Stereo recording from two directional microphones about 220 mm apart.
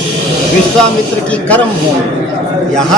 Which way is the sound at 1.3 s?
5° left (ahead or behind).